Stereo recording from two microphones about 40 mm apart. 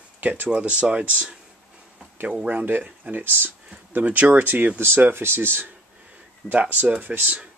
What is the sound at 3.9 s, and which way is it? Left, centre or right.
Speech, right.